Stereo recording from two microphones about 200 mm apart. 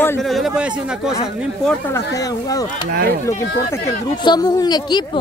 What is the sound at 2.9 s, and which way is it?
Speech, 50° right (ahead or behind).